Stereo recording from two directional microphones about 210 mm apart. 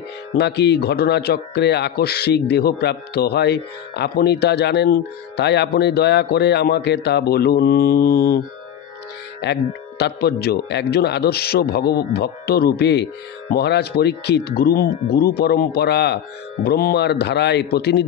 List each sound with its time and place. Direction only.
0.4 s speech: 55° left (ahead or behind)